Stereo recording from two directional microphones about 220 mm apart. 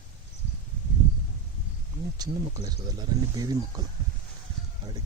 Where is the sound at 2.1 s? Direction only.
15° right (ahead or behind).